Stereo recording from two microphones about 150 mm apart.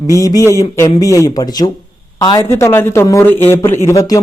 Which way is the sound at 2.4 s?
15° left (ahead or behind).